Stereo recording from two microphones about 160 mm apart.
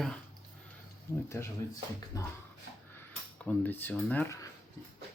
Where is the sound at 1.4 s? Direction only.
15° left (ahead or behind).